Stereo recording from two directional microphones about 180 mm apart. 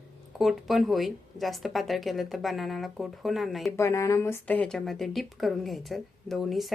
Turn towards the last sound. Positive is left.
turn(degrees=0)  # may be behind; listen again after turning